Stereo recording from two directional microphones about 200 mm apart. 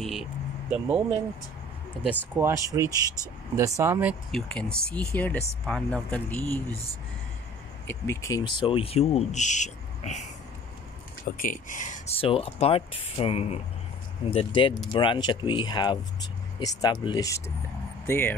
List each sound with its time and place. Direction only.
0.0 s vehicle: centre (ahead or behind)
2.0 s speech: 10° right (ahead or behind); by 6.6 s 10° left (ahead or behind)
7.8 s speech: 10° left (ahead or behind); by 10.2 s 35° left (ahead or behind)
11.2 s speech: 40° left (ahead or behind); by 18.3 s 10° left (ahead or behind)